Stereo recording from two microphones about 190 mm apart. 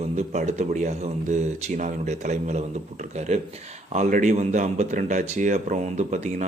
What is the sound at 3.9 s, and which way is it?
A man's voice, 40° right (ahead or behind).